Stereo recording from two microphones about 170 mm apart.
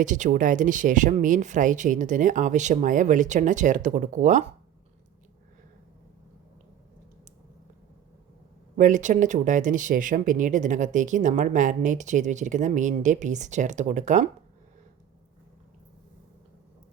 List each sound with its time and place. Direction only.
0.0 s speech: 50° right (ahead or behind)
8.7 s speech: 50° right (ahead or behind)